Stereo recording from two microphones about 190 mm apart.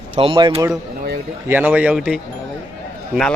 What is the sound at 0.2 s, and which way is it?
Speech, 25° right (ahead or behind).